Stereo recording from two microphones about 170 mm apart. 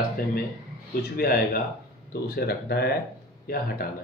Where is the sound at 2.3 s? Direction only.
70° left (ahead or behind).